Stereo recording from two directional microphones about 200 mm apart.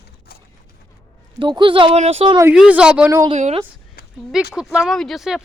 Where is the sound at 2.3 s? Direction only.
10° right (ahead or behind).